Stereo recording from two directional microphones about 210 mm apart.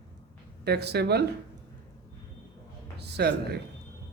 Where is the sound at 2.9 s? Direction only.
50° right (ahead or behind).